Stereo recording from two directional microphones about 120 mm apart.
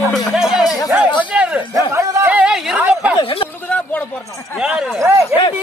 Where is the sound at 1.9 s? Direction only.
25° right (ahead or behind).